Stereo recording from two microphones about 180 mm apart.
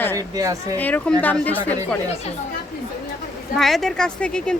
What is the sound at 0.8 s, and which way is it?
Speech, 10° left (ahead or behind).